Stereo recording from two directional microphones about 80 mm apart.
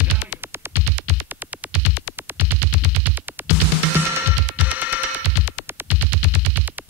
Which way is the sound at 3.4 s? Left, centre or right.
Right.